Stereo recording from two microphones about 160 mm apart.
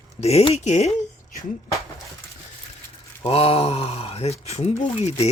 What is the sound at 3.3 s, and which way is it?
Speech, 35° left (ahead or behind).